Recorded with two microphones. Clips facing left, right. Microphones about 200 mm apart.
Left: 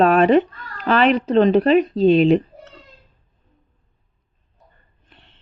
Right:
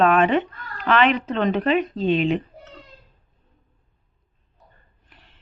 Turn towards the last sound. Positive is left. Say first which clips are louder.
# left 2 dB
turn(degrees=25)  # may be behind; listen again after turning